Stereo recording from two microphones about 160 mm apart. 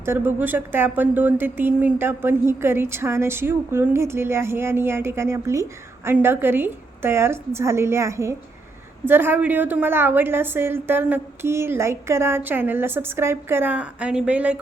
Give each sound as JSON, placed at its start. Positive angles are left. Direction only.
{"t": 0.0, "sound": "speech", "side_deg": -15}